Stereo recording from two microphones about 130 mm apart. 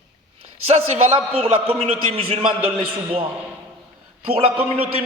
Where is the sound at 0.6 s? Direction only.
55° right (ahead or behind).